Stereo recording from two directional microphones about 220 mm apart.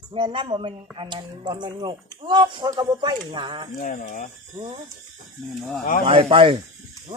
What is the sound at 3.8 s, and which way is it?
Speech, 40° left (ahead or behind).